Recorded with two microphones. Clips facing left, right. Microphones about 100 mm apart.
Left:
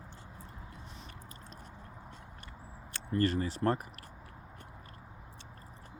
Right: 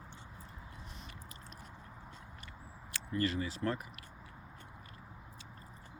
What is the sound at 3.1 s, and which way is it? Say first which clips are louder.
Speech: left 4 dB; 40° left (ahead or behind).